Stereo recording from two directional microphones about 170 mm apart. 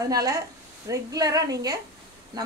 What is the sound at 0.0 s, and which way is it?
A woman's voice, 20° right (ahead or behind).